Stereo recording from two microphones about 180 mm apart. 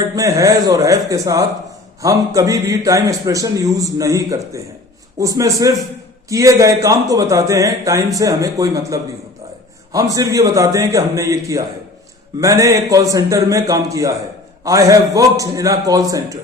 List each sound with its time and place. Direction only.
0.2 s a man's voice: 20° right (ahead or behind)